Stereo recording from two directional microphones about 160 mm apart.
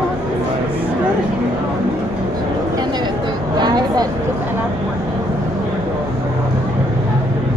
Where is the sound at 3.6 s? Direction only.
25° right (ahead or behind).